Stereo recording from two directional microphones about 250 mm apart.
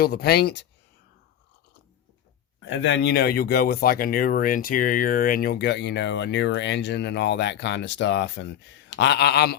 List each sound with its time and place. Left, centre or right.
0.0 s speech: left
2.6 s speech: left